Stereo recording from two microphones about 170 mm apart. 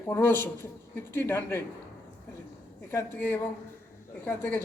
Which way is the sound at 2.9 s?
15° left (ahead or behind).